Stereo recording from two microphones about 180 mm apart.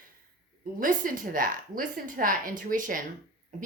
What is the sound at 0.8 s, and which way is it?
A woman's voice, 50° right (ahead or behind).